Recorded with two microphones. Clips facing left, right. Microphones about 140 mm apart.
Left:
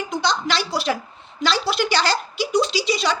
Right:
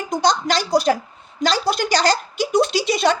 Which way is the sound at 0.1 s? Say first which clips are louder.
Right 5 dB; 45° right (ahead or behind).